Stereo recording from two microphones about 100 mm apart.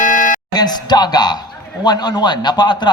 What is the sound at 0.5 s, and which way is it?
A man's voice, 45° left (ahead or behind).